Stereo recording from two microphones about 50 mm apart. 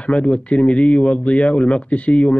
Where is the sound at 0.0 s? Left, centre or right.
Left.